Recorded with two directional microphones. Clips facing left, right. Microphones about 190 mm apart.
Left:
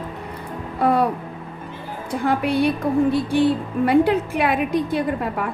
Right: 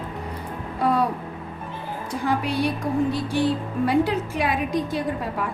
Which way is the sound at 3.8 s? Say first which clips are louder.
Left 5 dB; 60° left (ahead or behind).